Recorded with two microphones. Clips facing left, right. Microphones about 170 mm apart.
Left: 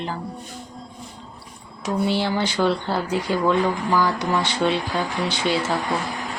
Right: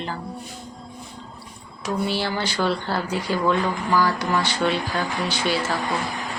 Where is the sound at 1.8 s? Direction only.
20° left (ahead or behind).